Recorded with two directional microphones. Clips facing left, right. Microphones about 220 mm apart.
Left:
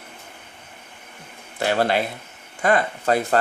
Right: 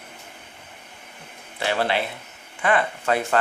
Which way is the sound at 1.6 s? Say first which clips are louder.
Left 3 dB; 45° left (ahead or behind).